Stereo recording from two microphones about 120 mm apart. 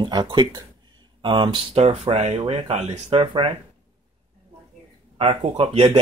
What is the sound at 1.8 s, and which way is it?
Speech, 60° right (ahead or behind).